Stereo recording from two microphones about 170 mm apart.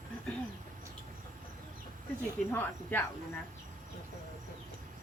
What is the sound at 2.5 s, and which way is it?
Speech, 10° left (ahead or behind).